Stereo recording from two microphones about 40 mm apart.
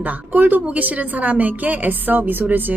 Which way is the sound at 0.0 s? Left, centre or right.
Right.